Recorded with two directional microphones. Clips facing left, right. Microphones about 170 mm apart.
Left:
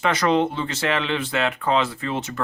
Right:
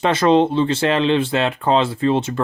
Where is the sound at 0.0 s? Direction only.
30° right (ahead or behind).